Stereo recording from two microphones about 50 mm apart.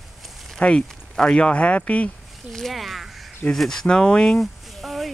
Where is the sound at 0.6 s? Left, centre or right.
Centre.